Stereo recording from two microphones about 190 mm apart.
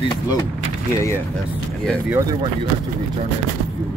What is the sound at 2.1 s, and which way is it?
Speech, 20° right (ahead or behind).